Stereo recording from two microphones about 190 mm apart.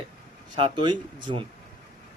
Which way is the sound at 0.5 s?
25° right (ahead or behind).